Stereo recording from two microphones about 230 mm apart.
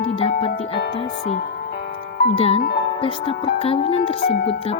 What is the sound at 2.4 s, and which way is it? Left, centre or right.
Music, left.